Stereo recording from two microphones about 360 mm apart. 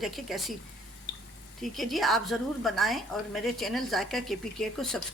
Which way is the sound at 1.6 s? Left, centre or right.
Centre.